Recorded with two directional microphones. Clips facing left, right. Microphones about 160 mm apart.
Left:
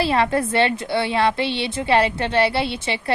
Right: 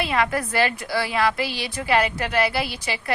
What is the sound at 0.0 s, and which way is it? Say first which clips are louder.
A woman's voice: left 4 dB; 30° left (ahead or behind).